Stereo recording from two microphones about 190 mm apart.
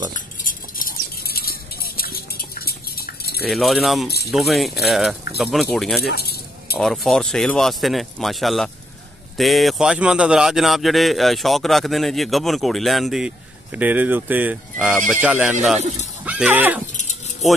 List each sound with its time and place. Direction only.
0.4 s a sound: 45° left (ahead or behind)
3.4 s speech: centre (ahead or behind)
6.0 s keys jangling: 55° left (ahead or behind)
6.8 s speech: centre (ahead or behind)